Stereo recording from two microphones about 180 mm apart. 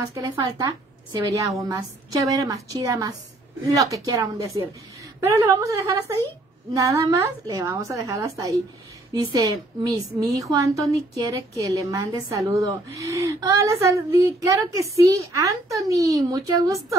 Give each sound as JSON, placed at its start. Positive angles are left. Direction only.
{"t": 0.1, "sound": "a woman's voice", "side_deg": -20}